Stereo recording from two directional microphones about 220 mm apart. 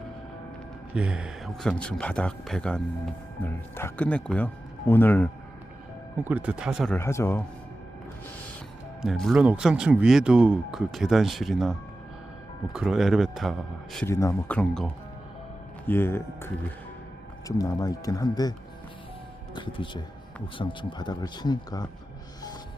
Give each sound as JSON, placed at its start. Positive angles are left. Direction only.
{"t": 0.9, "sound": "speech", "side_deg": -5}
{"t": 6.2, "sound": "speech", "side_deg": -5}
{"t": 7.0, "sound": "speech", "side_deg": 10}
{"t": 9.0, "sound": "speech", "side_deg": 0}
{"t": 12.7, "sound": "speech", "side_deg": 0}
{"t": 14.1, "sound": "speech", "side_deg": 15}
{"t": 17.6, "sound": "speech", "side_deg": 15}
{"t": 19.5, "sound": "speech", "side_deg": 20}